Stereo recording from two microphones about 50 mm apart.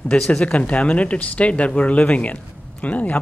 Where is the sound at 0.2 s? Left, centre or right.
Left.